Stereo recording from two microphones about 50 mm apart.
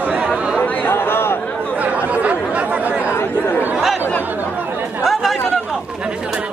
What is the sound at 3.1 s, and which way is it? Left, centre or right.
Chatter, left.